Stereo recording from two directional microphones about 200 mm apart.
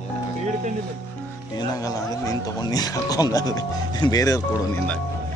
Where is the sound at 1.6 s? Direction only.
15° left (ahead or behind).